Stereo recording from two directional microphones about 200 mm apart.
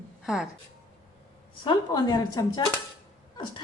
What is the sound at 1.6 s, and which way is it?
A woman's voice, 20° left (ahead or behind).